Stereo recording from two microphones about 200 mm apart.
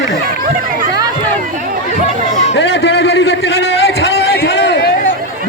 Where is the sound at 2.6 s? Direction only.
60° left (ahead or behind).